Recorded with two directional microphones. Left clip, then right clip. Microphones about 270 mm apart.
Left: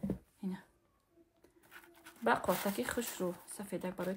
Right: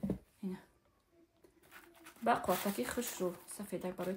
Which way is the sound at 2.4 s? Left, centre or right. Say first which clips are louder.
Left 1 dB; centre.